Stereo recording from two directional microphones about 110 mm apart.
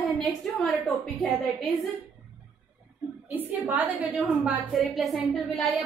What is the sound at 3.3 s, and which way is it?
A woman's voice, 15° right (ahead or behind).